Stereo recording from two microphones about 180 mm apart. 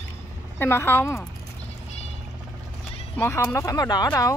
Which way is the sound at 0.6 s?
10° left (ahead or behind).